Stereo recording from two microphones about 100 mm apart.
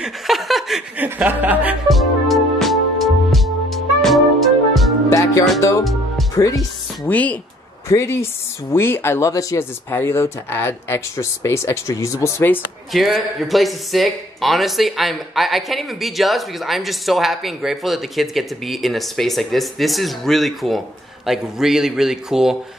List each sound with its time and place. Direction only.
0.0 s laughter: centre (ahead or behind)
0.9 s speech: 20° right (ahead or behind)
1.9 s music: centre (ahead or behind)
5.1 s music: 30° left (ahead or behind)
5.6 s speech: 30° left (ahead or behind)
7.1 s speech: 15° left (ahead or behind)
7.9 s speech: 25° left (ahead or behind)
12.9 s speech: centre (ahead or behind)